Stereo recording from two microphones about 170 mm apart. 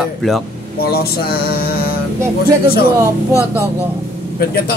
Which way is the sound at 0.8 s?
65° left (ahead or behind).